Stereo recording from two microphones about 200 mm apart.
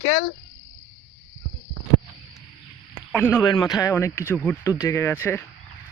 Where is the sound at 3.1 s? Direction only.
5° left (ahead or behind).